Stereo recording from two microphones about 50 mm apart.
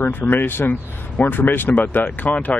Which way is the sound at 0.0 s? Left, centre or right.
Left.